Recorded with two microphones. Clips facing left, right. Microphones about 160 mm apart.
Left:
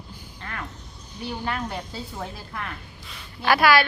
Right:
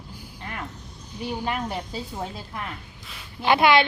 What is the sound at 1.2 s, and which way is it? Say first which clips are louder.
A woman's voice: right 1 dB; 15° right (ahead or behind).